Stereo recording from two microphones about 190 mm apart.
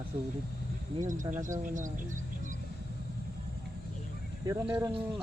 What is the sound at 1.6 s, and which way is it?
Speech, 40° right (ahead or behind).